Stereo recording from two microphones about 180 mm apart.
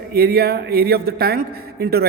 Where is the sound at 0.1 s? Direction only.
60° right (ahead or behind).